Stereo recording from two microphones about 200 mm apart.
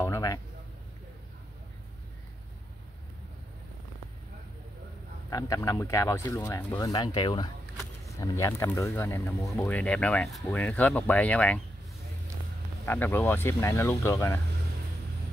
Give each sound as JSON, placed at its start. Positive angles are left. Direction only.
{"t": 0.0, "sound": "a sound", "side_deg": 15}
{"t": 5.3, "sound": "speech", "side_deg": 15}
{"t": 12.8, "sound": "speech", "side_deg": 10}